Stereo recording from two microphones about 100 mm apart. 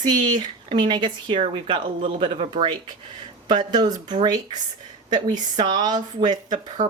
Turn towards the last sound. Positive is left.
turn(degrees=-45)  # may be behind; listen again after turning